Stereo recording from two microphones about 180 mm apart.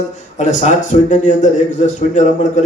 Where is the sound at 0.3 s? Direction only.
40° left (ahead or behind).